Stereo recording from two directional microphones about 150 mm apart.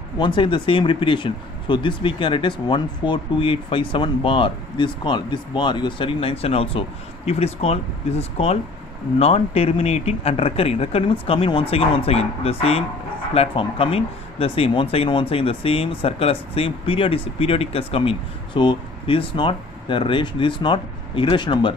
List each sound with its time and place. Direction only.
0.2 s speech: 30° left (ahead or behind)